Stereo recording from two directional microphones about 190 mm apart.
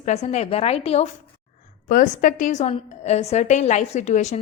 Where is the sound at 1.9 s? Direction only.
45° left (ahead or behind).